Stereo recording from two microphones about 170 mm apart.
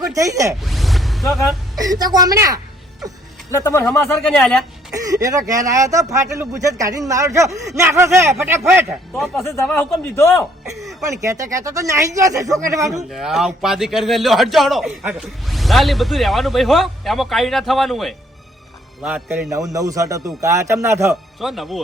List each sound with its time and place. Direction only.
0.1 s speech: 20° right (ahead or behind)
0.6 s zipper: centre (ahead or behind)
1.8 s speech: 20° right (ahead or behind)
3.5 s a man's voice: 15° left (ahead or behind)
4.9 s speech: 20° right (ahead or behind)
9.3 s a man's voice: 15° left (ahead or behind)
11.0 s speech: 20° right (ahead or behind)
13.1 s speech: centre (ahead or behind)
21.4 s speech: centre (ahead or behind)